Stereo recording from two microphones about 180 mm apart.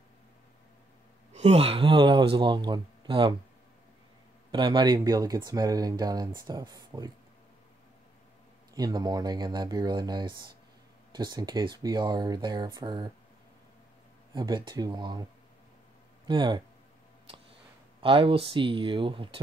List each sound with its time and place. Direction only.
1.3 s speech: 35° right (ahead or behind)
4.5 s speech: 25° right (ahead or behind)
8.7 s speech: 20° right (ahead or behind)
14.3 s speech: 25° right (ahead or behind)
16.3 s speech: 25° right (ahead or behind)
18.0 s speech: 30° right (ahead or behind)